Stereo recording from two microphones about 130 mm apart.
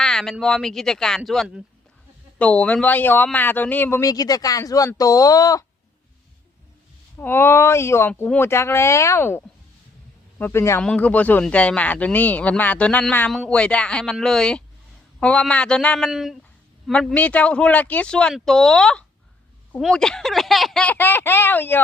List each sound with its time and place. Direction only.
0.0 s speech: 5° left (ahead or behind)
2.4 s speech: 10° left (ahead or behind); by 5.6 s 25° left (ahead or behind)
7.2 s speech: 15° left (ahead or behind)